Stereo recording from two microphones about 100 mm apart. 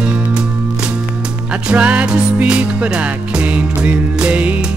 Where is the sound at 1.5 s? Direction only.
10° right (ahead or behind).